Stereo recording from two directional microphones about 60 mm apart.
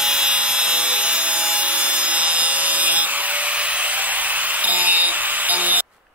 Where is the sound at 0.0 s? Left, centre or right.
Centre.